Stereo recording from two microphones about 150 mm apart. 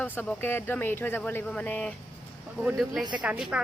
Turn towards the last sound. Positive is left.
turn(degrees=-10)  # may be behind; listen again after turning